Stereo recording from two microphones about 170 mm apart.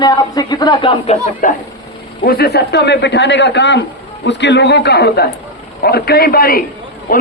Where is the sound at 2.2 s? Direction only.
65° left (ahead or behind).